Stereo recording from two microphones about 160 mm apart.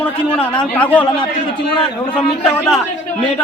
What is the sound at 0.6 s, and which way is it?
Speech, 10° left (ahead or behind).